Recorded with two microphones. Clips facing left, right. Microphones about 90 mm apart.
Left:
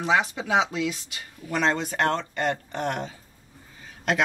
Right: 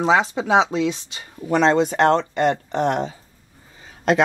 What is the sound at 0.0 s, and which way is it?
Speech, 30° right (ahead or behind).